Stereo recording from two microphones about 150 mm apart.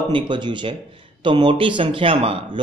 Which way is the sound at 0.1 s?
30° right (ahead or behind).